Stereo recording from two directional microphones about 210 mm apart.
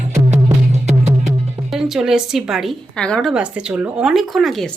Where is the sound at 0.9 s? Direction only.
35° right (ahead or behind).